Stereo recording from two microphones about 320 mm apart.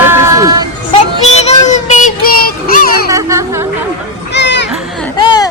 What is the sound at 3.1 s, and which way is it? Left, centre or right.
Speech, centre.